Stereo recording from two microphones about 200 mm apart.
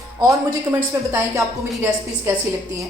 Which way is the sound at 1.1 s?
15° right (ahead or behind).